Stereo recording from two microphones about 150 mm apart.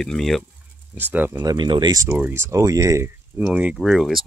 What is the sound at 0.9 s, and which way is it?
Speech, 15° right (ahead or behind).